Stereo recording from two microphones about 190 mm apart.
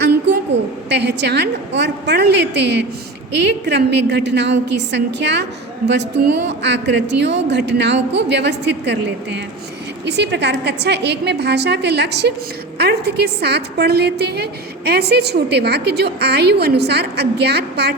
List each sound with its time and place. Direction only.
0.9 s a woman's voice: 60° right (ahead or behind)